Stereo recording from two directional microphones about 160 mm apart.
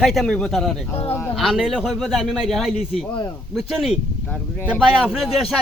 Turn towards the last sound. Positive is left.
turn(degrees=-5)  # may be behind; listen again after turning